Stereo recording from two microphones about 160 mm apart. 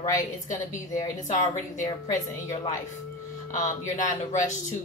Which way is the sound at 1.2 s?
50° left (ahead or behind).